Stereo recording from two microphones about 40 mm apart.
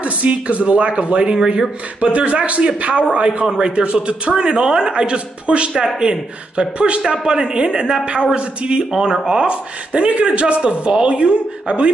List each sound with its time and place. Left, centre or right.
0.0 s a man's voice: right